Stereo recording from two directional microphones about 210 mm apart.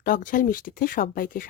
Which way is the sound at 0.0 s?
40° left (ahead or behind).